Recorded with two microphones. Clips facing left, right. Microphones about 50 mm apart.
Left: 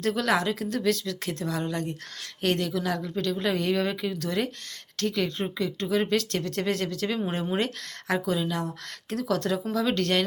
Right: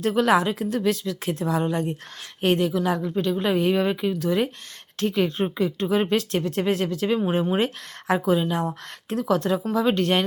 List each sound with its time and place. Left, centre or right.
0.0 s a woman's voice: centre